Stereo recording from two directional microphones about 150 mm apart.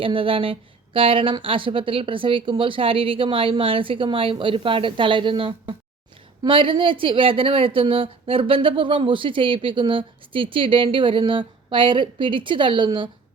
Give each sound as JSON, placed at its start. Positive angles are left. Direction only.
{"t": 0.0, "sound": "a woman's voice", "side_deg": -35}